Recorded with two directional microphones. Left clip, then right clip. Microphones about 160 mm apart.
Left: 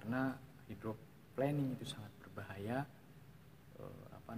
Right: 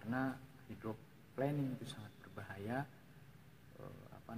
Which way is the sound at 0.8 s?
15° left (ahead or behind).